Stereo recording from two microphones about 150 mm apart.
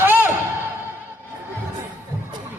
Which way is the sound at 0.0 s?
15° right (ahead or behind).